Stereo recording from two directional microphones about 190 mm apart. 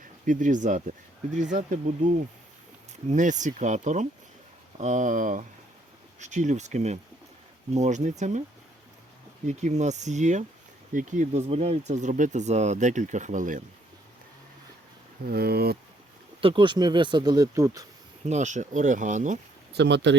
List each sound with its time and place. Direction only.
0.3 s speech: 45° right (ahead or behind)
2.9 s speech: 40° right (ahead or behind)
9.5 s speech: 35° right (ahead or behind)
15.3 s speech: 55° right (ahead or behind)
16.4 s speech: 25° right (ahead or behind)
18.3 s speech: 40° right (ahead or behind)
19.7 s speech: 65° right (ahead or behind)